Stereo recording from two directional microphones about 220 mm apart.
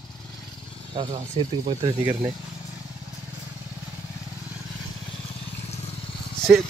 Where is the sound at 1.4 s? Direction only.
25° right (ahead or behind).